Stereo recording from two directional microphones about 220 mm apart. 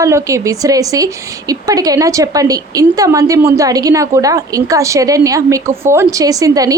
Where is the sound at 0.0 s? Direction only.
15° right (ahead or behind).